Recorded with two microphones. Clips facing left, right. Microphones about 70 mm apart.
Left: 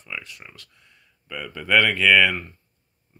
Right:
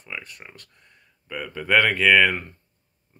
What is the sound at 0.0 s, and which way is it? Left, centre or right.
Speech, right.